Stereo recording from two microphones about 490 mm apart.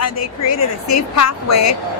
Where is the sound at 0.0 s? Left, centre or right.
Left.